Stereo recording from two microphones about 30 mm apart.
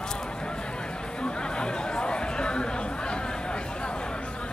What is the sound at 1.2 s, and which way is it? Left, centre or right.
Chatter, left.